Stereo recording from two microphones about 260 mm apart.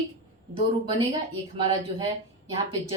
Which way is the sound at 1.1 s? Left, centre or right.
Centre.